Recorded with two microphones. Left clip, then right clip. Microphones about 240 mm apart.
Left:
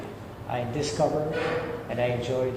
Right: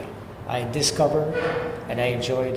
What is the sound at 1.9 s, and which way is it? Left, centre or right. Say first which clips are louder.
Speech: right 3 dB; right.